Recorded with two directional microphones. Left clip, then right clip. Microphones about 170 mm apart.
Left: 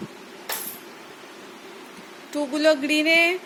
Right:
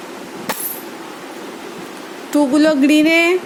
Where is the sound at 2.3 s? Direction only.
35° right (ahead or behind).